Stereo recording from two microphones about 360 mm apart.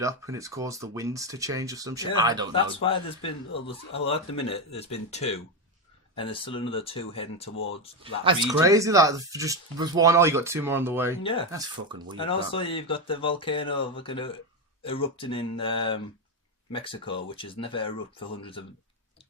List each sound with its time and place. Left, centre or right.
0.0 s speech: centre
2.8 s speech: centre
8.0 s speech: centre
11.2 s speech: centre